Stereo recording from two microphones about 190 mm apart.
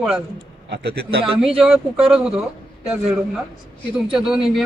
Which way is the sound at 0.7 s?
60° right (ahead or behind).